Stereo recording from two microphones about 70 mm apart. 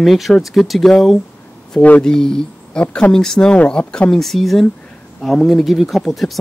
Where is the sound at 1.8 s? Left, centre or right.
Left.